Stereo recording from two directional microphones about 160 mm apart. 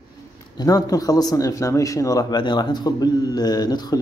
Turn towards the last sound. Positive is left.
turn(degrees=25)  # may be behind; listen again after turning